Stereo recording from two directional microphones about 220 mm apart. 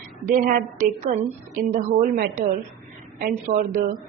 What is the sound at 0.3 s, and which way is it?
A woman's voice, 40° right (ahead or behind).